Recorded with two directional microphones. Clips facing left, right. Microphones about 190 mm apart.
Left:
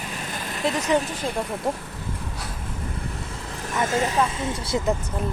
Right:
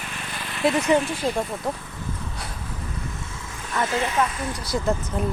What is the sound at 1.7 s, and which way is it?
Speech, 30° left (ahead or behind).